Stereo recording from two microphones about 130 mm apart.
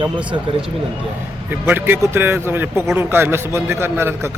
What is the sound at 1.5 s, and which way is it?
A man's voice, 15° right (ahead or behind).